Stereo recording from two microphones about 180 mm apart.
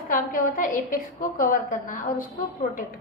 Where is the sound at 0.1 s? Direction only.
50° left (ahead or behind).